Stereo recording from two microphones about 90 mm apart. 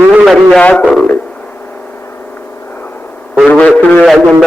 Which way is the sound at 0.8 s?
5° left (ahead or behind).